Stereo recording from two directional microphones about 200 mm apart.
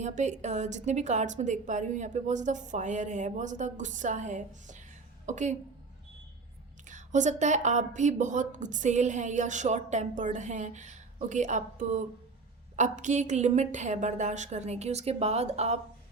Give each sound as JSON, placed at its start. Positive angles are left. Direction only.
{"t": 0.0, "sound": "a woman's voice", "side_deg": -35}
{"t": 6.8, "sound": "speech", "side_deg": -40}